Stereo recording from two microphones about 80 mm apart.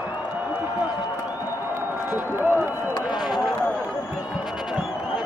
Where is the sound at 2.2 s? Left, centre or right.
Right.